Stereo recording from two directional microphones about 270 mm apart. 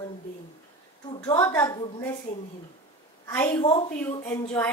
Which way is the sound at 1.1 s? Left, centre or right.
Centre.